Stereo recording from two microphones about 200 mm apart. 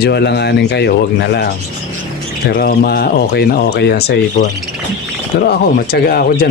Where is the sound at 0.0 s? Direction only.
55° left (ahead or behind).